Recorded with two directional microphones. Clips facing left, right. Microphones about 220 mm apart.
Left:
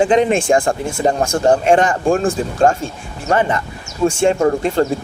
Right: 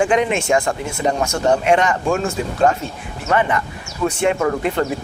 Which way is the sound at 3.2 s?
30° left (ahead or behind).